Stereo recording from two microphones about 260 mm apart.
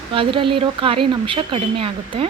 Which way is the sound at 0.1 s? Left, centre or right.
Centre.